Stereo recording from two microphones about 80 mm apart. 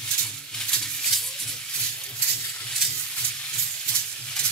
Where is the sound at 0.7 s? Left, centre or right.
Centre.